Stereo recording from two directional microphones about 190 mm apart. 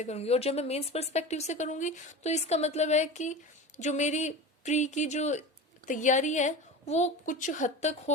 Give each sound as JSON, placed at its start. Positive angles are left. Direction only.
{"t": 0.0, "sound": "a woman's voice", "side_deg": 35}